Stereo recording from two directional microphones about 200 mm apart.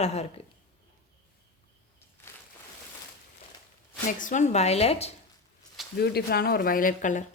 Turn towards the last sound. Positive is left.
turn(degrees=40)  # may be behind; listen again after turning